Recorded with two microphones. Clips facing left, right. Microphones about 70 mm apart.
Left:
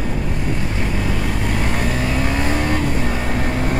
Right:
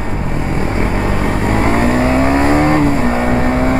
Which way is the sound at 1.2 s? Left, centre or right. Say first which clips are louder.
Right 8 dB; right.